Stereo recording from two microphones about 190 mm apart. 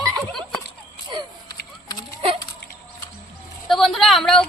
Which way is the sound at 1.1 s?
25° right (ahead or behind).